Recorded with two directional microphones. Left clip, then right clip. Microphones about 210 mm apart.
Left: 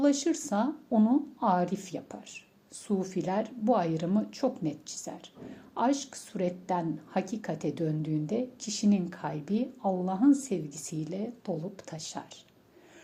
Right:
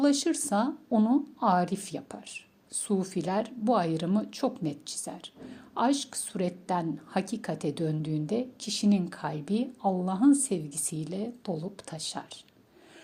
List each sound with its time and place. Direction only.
0.0 s a woman's voice: 25° right (ahead or behind)